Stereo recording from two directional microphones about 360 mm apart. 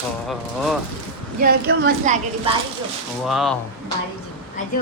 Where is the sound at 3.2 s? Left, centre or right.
Centre.